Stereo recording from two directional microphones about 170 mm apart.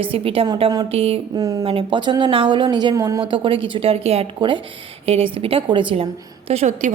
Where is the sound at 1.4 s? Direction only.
20° right (ahead or behind).